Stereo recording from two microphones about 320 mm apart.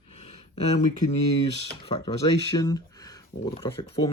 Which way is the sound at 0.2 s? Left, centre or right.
Centre.